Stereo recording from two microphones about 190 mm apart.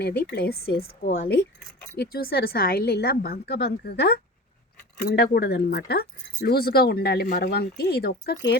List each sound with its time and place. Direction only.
0.0 s speech: 55° left (ahead or behind)